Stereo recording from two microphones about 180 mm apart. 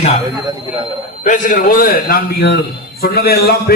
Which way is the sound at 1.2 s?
45° left (ahead or behind).